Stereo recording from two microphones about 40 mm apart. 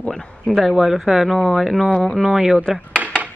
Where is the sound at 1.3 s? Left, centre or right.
Centre.